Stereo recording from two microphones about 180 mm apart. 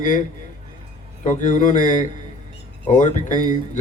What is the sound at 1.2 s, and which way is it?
Speech, 45° left (ahead or behind).